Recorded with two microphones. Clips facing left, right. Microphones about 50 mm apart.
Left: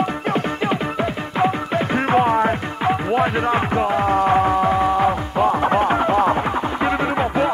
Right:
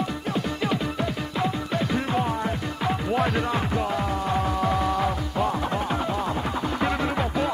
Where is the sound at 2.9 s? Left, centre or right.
Left.